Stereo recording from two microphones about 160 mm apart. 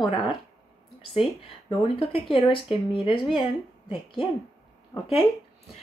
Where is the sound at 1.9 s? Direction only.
35° left (ahead or behind).